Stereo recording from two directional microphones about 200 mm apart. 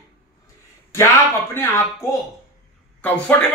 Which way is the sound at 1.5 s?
15° left (ahead or behind).